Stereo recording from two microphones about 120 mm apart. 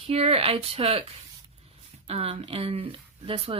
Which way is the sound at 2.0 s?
55° right (ahead or behind).